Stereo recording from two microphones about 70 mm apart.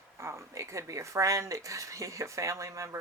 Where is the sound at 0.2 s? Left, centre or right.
Right.